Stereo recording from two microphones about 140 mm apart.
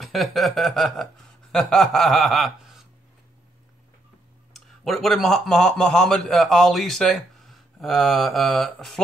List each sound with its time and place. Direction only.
0.0 s speech: centre (ahead or behind)
4.6 s a man's voice: centre (ahead or behind)